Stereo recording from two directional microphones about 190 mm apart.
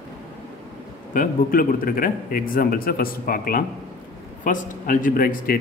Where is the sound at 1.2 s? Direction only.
50° left (ahead or behind).